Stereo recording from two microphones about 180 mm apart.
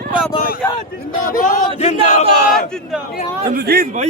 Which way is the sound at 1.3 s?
50° left (ahead or behind).